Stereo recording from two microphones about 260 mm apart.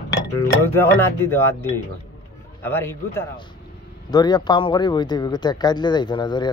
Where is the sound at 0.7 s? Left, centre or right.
Centre.